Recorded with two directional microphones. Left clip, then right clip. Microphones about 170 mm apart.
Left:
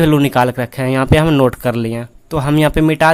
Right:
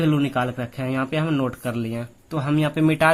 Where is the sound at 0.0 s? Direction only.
50° left (ahead or behind).